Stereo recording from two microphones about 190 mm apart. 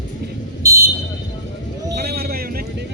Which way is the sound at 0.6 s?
15° right (ahead or behind).